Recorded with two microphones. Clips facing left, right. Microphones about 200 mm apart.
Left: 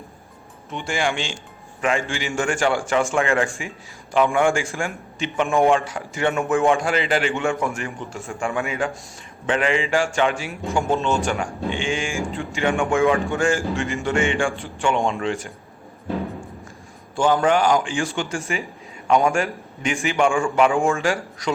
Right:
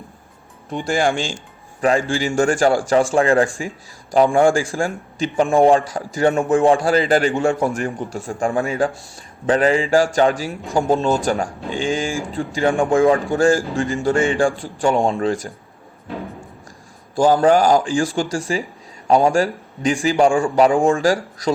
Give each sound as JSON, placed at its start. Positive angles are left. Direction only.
{"t": 0.7, "sound": "speech", "side_deg": -35}
{"t": 17.2, "sound": "speech", "side_deg": -35}